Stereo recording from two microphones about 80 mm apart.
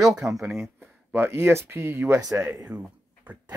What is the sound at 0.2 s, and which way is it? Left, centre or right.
Speech, right.